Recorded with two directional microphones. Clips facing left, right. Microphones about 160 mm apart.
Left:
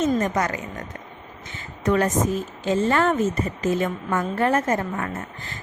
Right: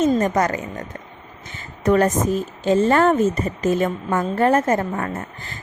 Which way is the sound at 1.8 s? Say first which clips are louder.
Right 4 dB; 40° right (ahead or behind).